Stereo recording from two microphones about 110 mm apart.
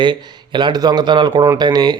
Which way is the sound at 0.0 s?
45° right (ahead or behind).